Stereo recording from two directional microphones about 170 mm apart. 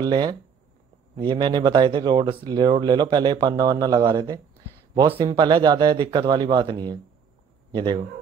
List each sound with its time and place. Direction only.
0.0 s speech: 25° right (ahead or behind)